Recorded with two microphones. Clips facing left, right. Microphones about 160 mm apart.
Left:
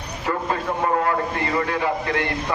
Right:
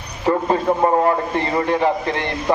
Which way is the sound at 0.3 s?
30° right (ahead or behind).